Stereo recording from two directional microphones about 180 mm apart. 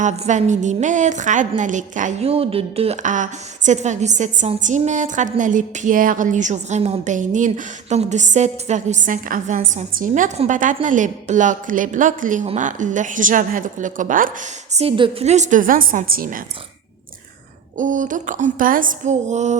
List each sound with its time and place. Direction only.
0.0 s a woman's voice: 40° right (ahead or behind)
14.8 s a woman's voice: 30° right (ahead or behind); by 16.4 s 50° right (ahead or behind)
17.7 s a woman's voice: 45° right (ahead or behind)